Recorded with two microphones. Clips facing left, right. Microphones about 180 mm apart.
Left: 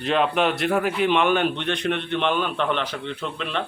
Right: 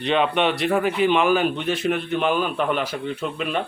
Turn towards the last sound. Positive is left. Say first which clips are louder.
# right 3 dB
turn(degrees=-10)  # may be behind; listen again after turning